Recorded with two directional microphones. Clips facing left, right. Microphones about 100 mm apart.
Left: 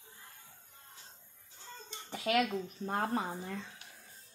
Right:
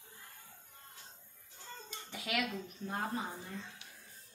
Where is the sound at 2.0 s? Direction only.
35° left (ahead or behind).